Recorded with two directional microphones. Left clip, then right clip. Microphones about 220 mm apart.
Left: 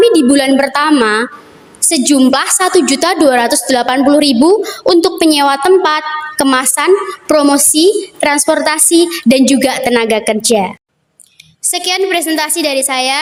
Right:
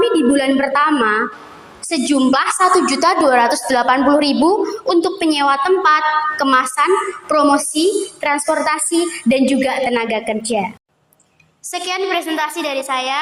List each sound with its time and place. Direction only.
0.0 s a woman's voice: 45° left (ahead or behind)
11.7 s a woman's voice: 45° left (ahead or behind)